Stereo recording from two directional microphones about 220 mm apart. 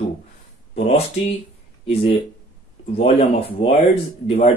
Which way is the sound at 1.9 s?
25° left (ahead or behind).